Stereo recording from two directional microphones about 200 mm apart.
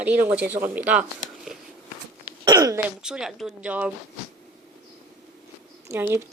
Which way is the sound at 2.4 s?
15° right (ahead or behind).